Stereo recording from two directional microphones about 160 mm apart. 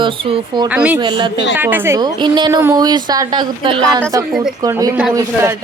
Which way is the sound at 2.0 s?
25° right (ahead or behind).